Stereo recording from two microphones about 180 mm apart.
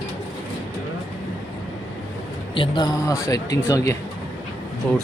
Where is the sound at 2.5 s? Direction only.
25° left (ahead or behind); by 5.0 s 10° left (ahead or behind).